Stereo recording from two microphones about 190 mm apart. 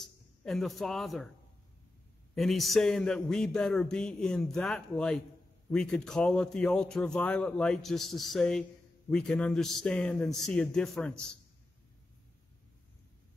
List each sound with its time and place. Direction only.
0.0 s speech: centre (ahead or behind)
2.3 s a man's voice: centre (ahead or behind)